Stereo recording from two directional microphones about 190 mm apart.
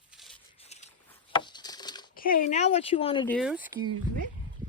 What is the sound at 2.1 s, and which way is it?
Speech, 50° left (ahead or behind).